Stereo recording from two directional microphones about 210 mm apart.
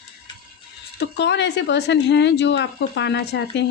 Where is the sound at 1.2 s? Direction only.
55° left (ahead or behind).